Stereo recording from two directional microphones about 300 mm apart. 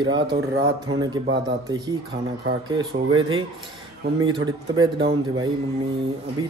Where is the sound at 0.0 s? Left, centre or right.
Centre.